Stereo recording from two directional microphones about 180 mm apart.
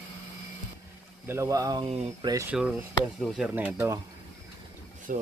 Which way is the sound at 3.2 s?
Centre (ahead or behind).